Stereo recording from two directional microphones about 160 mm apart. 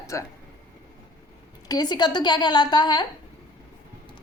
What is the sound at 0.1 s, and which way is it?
Speech, 20° left (ahead or behind).